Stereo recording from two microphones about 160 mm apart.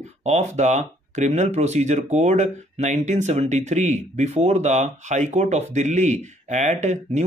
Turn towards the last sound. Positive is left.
turn(degrees=-45)  # may be behind; listen again after turning